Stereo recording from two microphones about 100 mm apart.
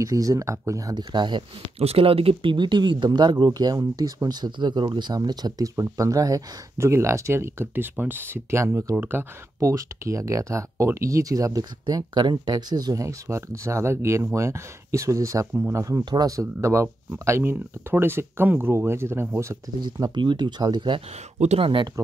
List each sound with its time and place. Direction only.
0.0 s speech: 35° right (ahead or behind)
1.1 s speech: 50° right (ahead or behind)
1.8 s speech: 80° right; by 9.2 s 20° right (ahead or behind)
9.6 s speech: 30° right (ahead or behind)
19.8 s speech: 50° right (ahead or behind)
21.4 s speech: 75° right (ahead or behind)